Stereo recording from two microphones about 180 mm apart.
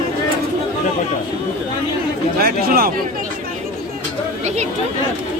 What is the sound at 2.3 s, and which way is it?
Speech, 60° right (ahead or behind).